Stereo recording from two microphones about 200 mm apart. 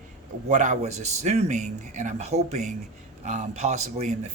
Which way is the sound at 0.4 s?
35° right (ahead or behind).